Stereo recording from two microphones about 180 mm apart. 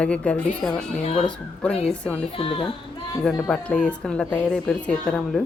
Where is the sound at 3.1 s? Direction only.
5° left (ahead or behind).